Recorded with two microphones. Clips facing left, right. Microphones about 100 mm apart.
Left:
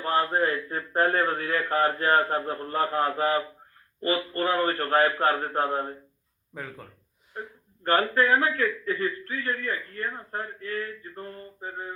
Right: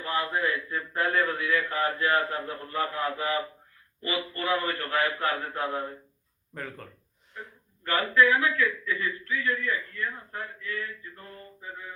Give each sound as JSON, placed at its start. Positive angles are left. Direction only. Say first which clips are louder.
{"t": 0.0, "sound": "a man's voice", "louder": "left 4 dB", "side_deg": 45}
{"t": 6.5, "sound": "speech", "louder": "even", "side_deg": 5}
{"t": 7.3, "sound": "a man's voice", "louder": "left 5 dB", "side_deg": 40}